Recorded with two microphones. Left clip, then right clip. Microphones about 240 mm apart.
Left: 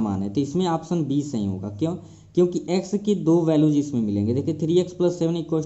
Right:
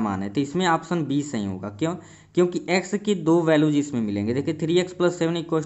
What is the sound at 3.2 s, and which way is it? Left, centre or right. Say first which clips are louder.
Speech: even; right.